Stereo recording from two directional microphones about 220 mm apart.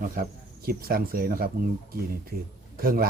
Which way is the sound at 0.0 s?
40° right (ahead or behind).